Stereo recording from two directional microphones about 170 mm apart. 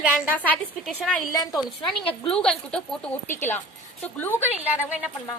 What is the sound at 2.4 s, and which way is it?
A woman's voice, 5° left (ahead or behind).